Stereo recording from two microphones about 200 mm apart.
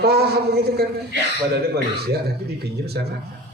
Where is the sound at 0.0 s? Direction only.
55° right (ahead or behind).